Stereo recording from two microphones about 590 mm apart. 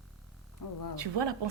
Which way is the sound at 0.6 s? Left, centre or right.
Left.